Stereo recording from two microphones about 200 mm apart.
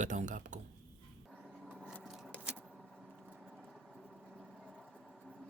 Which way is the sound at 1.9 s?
Centre (ahead or behind).